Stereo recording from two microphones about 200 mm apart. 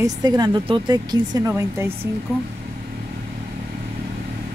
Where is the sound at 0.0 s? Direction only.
20° right (ahead or behind).